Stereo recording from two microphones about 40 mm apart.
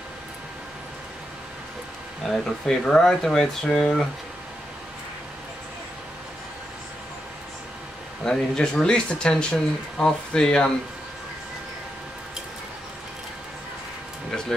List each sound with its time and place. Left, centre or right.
2.6 s speech: centre
8.2 s speech: centre